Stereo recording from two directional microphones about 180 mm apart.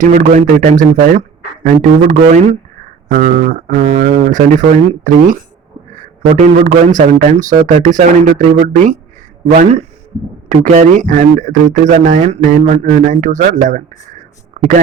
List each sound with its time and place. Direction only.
0.0 s speech: 45° right (ahead or behind)
4.0 s speech: 45° right (ahead or behind)